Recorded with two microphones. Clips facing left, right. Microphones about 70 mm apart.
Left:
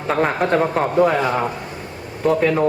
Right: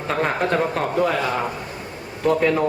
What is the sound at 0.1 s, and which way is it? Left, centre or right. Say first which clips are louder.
Speech: left 3 dB; centre.